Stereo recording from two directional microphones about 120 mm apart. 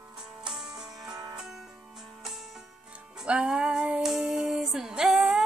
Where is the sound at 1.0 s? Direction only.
30° right (ahead or behind).